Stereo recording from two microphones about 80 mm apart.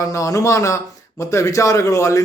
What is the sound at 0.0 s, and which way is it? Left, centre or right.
A man's voice, left.